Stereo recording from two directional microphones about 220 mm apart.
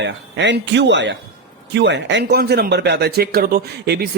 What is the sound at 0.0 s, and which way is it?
Speech, 55° right (ahead or behind).